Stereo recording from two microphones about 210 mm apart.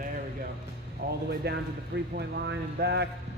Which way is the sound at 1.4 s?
50° right (ahead or behind).